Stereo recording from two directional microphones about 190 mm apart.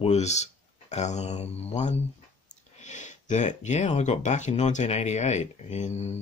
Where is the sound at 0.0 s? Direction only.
35° left (ahead or behind).